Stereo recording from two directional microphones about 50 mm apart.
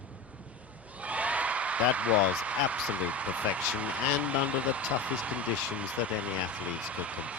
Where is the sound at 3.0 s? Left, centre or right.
Right.